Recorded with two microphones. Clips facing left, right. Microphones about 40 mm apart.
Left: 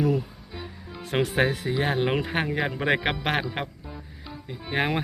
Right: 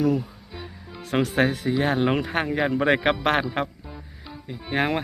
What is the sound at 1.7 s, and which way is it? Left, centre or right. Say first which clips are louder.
Speech: right 3 dB; centre.